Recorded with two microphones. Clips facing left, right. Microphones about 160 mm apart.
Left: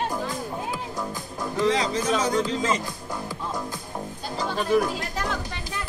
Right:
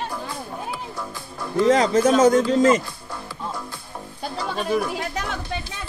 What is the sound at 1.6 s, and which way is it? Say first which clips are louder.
Speech: right 7 dB; 45° right (ahead or behind).